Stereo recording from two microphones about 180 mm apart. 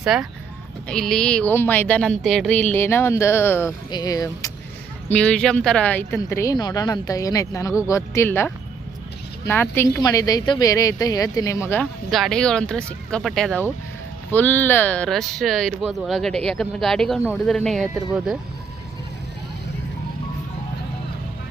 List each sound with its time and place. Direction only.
0.0 s speech: 5° right (ahead or behind); by 4.5 s 20° left (ahead or behind)
5.1 s speech: 5° left (ahead or behind)
12.1 s speech: centre (ahead or behind)